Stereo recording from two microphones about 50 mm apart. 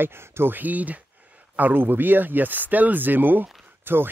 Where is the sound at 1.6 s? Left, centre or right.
Right.